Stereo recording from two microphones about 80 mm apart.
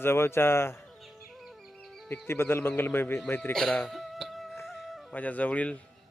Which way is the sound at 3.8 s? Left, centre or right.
Centre.